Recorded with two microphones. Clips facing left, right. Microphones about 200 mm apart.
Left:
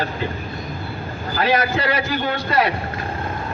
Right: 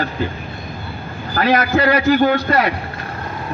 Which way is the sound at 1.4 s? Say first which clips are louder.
Right 4 dB; 55° right (ahead or behind).